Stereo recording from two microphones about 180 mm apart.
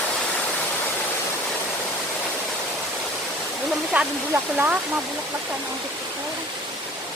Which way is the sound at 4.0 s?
10° right (ahead or behind).